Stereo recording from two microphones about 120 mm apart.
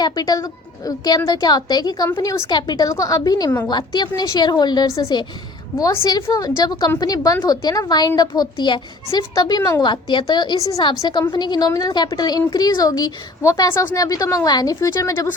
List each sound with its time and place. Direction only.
0.0 s a woman's voice: 30° left (ahead or behind)
6.2 s a woman's voice: 30° left (ahead or behind)
9.8 s a woman's voice: 40° left (ahead or behind)